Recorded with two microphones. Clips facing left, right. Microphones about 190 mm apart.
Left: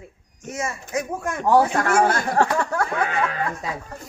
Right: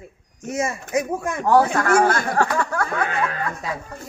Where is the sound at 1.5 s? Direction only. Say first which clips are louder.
Right 1 dB; 25° left (ahead or behind).